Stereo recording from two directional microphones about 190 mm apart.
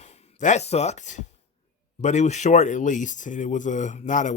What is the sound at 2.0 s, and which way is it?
Speech, 40° left (ahead or behind).